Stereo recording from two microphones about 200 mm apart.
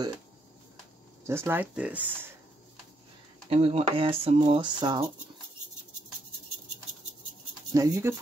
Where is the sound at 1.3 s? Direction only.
10° right (ahead or behind).